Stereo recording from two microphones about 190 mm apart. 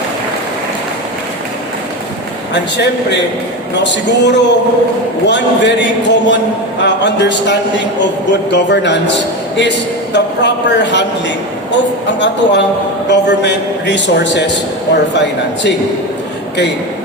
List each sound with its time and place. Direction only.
2.5 s a man's voice: 65° left (ahead or behind)
12.0 s a man's voice: 65° left (ahead or behind)